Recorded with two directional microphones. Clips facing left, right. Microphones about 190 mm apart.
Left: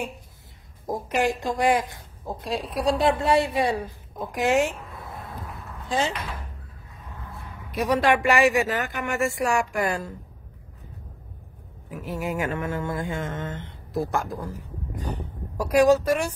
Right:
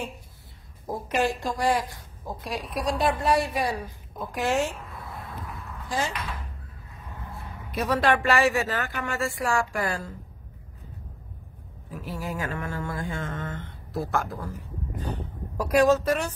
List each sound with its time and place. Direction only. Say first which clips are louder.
0.8 s a sound: left 2 dB; 15° left (ahead or behind)
4.4 s speech: left 4 dB; 20° left (ahead or behind)
5.9 s speech: left 4 dB; 25° left (ahead or behind)
7.8 s speech: left 2 dB; 15° left (ahead or behind)
12.1 s a sound: left 5 dB; 20° left (ahead or behind)
15.0 s speech: left 2 dB; 10° left (ahead or behind)